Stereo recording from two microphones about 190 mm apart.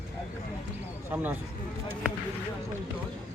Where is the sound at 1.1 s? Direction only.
10° right (ahead or behind).